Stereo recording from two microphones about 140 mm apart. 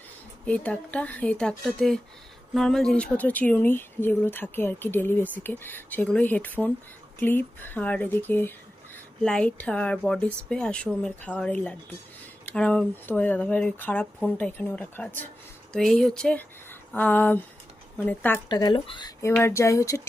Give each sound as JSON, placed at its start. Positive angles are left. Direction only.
{"t": 0.4, "sound": "speech", "side_deg": 10}
{"t": 15.7, "sound": "speech", "side_deg": 0}
{"t": 18.4, "sound": "speech", "side_deg": 30}
{"t": 19.3, "sound": "speech", "side_deg": 15}